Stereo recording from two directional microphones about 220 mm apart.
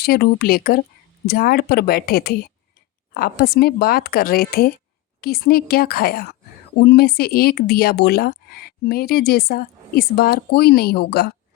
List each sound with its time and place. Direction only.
0.0 s speech: 45° left (ahead or behind)